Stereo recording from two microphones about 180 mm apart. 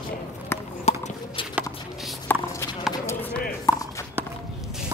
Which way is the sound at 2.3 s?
10° left (ahead or behind).